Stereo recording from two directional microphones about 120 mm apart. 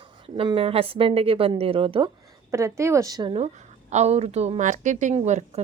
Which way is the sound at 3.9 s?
65° right (ahead or behind).